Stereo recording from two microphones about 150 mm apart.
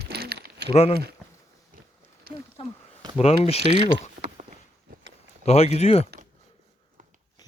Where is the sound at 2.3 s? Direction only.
90° right.